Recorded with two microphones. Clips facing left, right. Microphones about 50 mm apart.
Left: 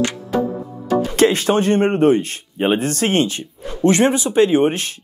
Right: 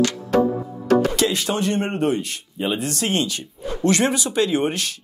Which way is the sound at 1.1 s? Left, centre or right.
Left.